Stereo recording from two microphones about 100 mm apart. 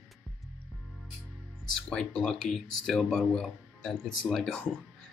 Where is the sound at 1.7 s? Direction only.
5° left (ahead or behind).